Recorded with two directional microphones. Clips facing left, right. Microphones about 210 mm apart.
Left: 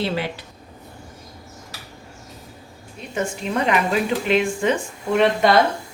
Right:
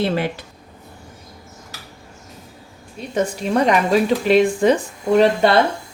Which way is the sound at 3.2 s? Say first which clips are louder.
Right 5 dB; 40° right (ahead or behind).